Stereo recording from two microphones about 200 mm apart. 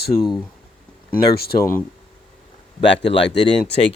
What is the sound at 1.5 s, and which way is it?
Speech, 15° left (ahead or behind).